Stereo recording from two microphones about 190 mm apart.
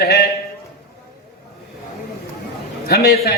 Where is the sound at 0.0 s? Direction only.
60° left (ahead or behind).